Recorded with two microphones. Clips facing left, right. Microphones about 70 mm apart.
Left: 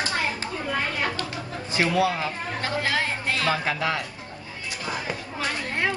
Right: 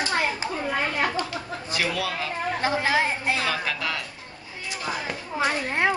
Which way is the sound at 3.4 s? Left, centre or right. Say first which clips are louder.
Left 3 dB; left.